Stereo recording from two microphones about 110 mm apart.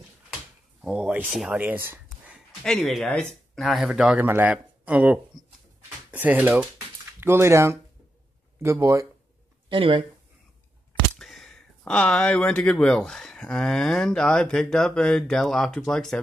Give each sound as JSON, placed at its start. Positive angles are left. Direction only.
{"t": 0.8, "sound": "speech", "side_deg": -10}
{"t": 1.6, "sound": "speech", "side_deg": -20}
{"t": 2.6, "sound": "speech", "side_deg": 5}
{"t": 4.2, "sound": "speech", "side_deg": -15}
{"t": 9.7, "sound": "speech", "side_deg": -50}
{"t": 11.1, "sound": "speech", "side_deg": 0}